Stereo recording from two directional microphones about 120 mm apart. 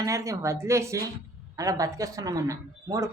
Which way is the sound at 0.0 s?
25° right (ahead or behind).